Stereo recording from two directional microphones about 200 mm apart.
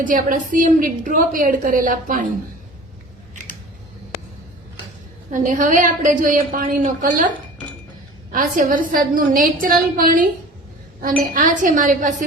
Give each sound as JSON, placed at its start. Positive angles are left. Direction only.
{"t": 0.0, "sound": "a woman's voice", "side_deg": -40}
{"t": 5.3, "sound": "a woman's voice", "side_deg": -40}
{"t": 8.3, "sound": "a woman's voice", "side_deg": -45}